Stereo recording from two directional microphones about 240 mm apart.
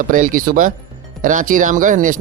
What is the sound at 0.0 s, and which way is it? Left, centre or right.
Speech, right.